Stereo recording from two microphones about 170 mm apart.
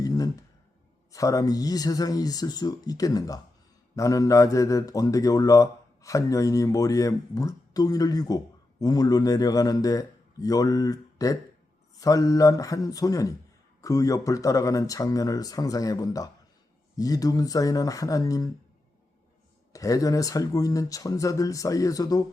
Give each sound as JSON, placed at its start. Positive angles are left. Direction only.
{"t": 0.0, "sound": "a sound", "side_deg": 20}
{"t": 1.1, "sound": "a man's voice", "side_deg": 20}
{"t": 19.7, "sound": "a man's voice", "side_deg": 20}